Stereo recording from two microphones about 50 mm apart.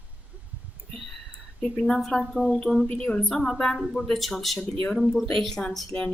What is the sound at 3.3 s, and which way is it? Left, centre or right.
A woman's voice, centre.